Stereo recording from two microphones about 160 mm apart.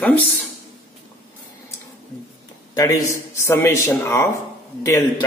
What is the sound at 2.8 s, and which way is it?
A man's voice, 20° left (ahead or behind).